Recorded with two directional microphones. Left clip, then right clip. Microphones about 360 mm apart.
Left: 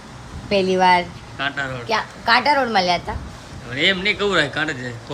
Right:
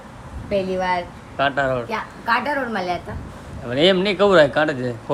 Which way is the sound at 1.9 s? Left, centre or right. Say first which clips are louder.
Left 4 dB; left.